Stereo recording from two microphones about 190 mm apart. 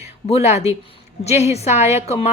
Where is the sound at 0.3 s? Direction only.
35° left (ahead or behind).